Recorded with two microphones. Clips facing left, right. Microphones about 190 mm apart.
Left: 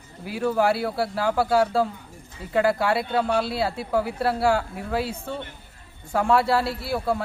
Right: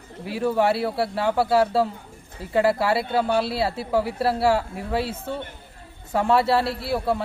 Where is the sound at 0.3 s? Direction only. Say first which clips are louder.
Right 1 dB; centre (ahead or behind).